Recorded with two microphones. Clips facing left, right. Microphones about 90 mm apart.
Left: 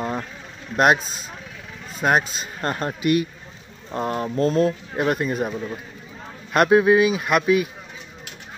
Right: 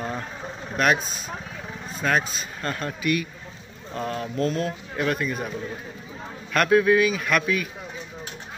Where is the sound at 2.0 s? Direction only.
20° left (ahead or behind).